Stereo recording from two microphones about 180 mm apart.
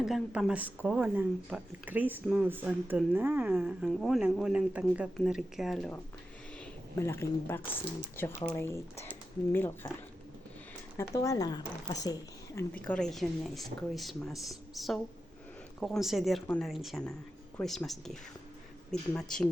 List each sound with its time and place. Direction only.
0.0 s speech: 5° right (ahead or behind)
7.0 s speech: 15° left (ahead or behind)
10.9 s speech: 15° left (ahead or behind)
12.5 s speech: 10° left (ahead or behind)